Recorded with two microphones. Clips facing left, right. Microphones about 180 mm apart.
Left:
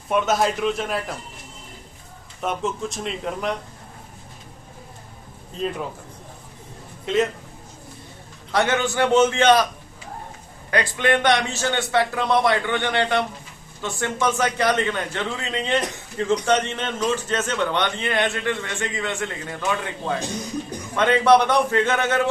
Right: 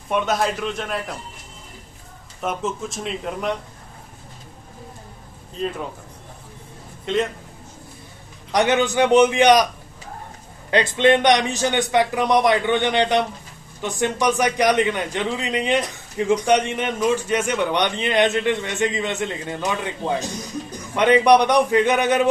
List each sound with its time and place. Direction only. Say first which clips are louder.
0.1 s speech: left 1 dB; centre (ahead or behind)
2.4 s speech: even; centre (ahead or behind)
7.0 s a man's voice: left 1 dB; centre (ahead or behind)
8.5 s a man's voice: right 3 dB; 15° right (ahead or behind)
10.7 s a man's voice: right 5 dB; 20° right (ahead or behind)